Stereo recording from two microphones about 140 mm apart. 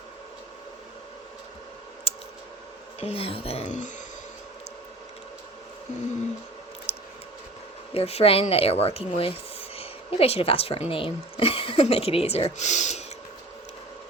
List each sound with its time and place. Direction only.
2.1 s typing: 45° left (ahead or behind)
3.0 s speech: 45° left (ahead or behind); by 3.9 s 60° left (ahead or behind)
6.9 s a sound: 45° left (ahead or behind)
7.9 s speech: 45° left (ahead or behind)